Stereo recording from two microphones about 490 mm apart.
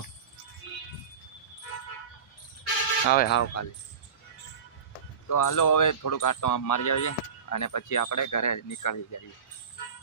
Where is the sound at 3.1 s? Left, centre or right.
Centre.